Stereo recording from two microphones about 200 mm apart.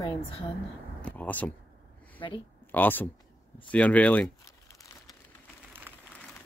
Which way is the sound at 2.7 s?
10° left (ahead or behind).